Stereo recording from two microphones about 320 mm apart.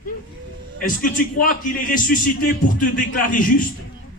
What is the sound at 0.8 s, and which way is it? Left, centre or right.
A man's voice, left.